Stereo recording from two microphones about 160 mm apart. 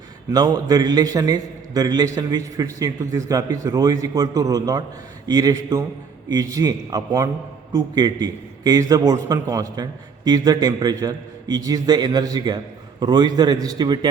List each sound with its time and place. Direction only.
0.3 s a man's voice: 25° right (ahead or behind)